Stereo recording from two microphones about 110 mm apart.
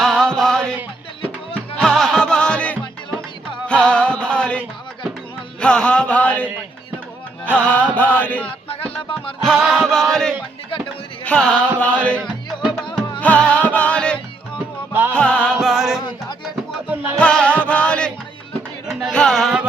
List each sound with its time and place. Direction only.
0.0 s music: 5° left (ahead or behind)
1.8 s music: 5° left (ahead or behind)
5.5 s chant: 10° left (ahead or behind)
9.4 s chant: 5° left (ahead or behind)
13.1 s music: 15° left (ahead or behind)
15.6 s music: centre (ahead or behind)
16.9 s music: 15° right (ahead or behind)
17.2 s music: 10° left (ahead or behind)
18.9 s music: centre (ahead or behind)
19.1 s chant: 5° left (ahead or behind)